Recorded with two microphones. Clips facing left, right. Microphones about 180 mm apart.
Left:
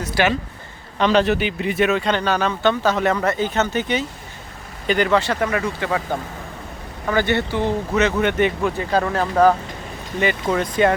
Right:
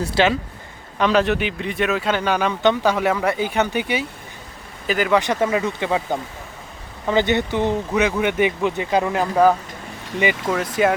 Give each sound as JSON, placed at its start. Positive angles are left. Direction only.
{"t": 0.0, "sound": "speech", "side_deg": -25}
{"t": 0.9, "sound": "speech", "side_deg": 0}
{"t": 5.2, "sound": "speech", "side_deg": -20}